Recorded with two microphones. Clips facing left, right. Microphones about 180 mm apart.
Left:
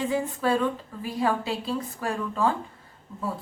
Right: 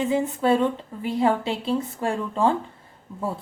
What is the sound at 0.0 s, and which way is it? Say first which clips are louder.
Speech: right 4 dB; 20° right (ahead or behind).